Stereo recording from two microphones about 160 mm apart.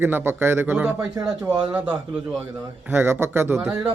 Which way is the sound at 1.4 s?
30° right (ahead or behind).